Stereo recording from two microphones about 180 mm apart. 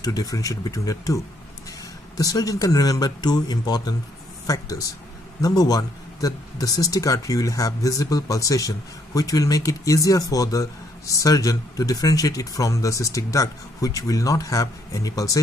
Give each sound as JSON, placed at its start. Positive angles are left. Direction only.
{"t": 0.0, "sound": "a man's voice", "side_deg": 20}